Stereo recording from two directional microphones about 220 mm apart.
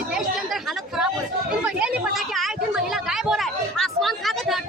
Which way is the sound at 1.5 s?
5° right (ahead or behind).